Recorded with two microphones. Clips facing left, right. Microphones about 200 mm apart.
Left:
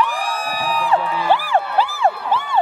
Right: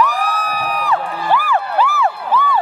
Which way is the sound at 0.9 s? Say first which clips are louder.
Left 1 dB; 30° left (ahead or behind).